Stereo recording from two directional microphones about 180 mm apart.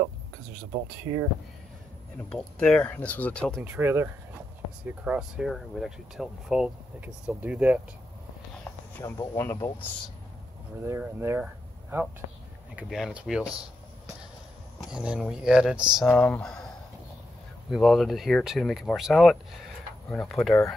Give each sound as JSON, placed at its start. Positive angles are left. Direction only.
{"t": 1.1, "sound": "speech", "side_deg": -15}
{"t": 2.2, "sound": "speech", "side_deg": 5}
{"t": 3.6, "sound": "speech", "side_deg": -10}
{"t": 9.0, "sound": "speech", "side_deg": 15}
{"t": 10.8, "sound": "speech", "side_deg": -15}
{"t": 14.8, "sound": "speech", "side_deg": -5}